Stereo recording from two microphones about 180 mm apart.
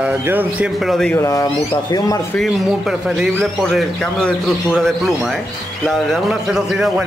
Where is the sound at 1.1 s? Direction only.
15° left (ahead or behind).